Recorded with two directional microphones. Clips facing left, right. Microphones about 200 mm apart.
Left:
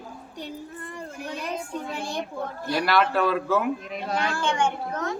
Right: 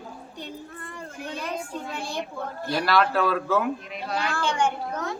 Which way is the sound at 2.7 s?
Centre (ahead or behind).